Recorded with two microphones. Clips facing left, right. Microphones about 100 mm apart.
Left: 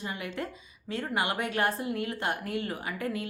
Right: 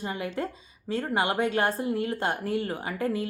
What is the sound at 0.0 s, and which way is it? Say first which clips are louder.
A woman's voice: right 4 dB; 30° right (ahead or behind).